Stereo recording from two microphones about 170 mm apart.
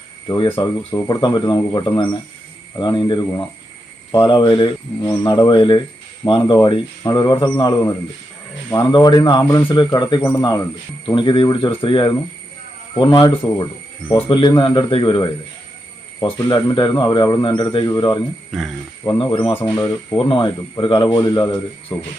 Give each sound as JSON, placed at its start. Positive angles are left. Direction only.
{"t": 0.3, "sound": "speech", "side_deg": 30}
{"t": 10.2, "sound": "speech", "side_deg": 15}
{"t": 11.0, "sound": "speech", "side_deg": 30}
{"t": 16.5, "sound": "speech", "side_deg": 25}
{"t": 18.5, "sound": "speech", "side_deg": 0}
{"t": 19.0, "sound": "speech", "side_deg": 25}